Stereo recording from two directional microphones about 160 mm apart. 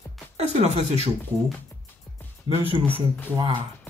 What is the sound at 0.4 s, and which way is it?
Speech, 45° right (ahead or behind).